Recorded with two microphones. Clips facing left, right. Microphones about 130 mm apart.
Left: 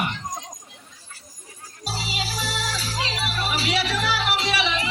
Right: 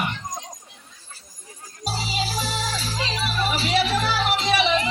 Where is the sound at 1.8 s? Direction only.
45° right (ahead or behind).